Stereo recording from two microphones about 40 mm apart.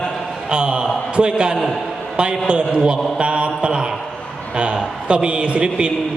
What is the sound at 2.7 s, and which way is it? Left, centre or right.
A man's voice, right.